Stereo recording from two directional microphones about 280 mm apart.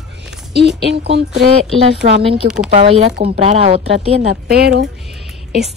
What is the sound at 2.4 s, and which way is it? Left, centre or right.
Speech, centre.